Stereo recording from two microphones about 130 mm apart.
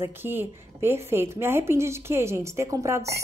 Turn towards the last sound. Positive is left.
turn(degrees=-20)  # may be behind; listen again after turning